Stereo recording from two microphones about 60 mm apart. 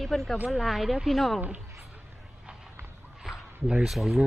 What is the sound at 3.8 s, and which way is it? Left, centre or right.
Speech, centre.